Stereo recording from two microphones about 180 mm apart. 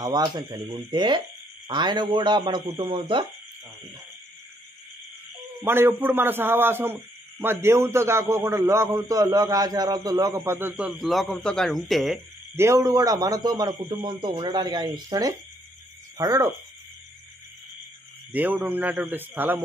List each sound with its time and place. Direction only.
0.0 s a man's voice: 20° right (ahead or behind)
5.7 s a man's voice: 10° right (ahead or behind)
12.5 s a man's voice: 15° right (ahead or behind)
18.3 s a man's voice: 10° right (ahead or behind)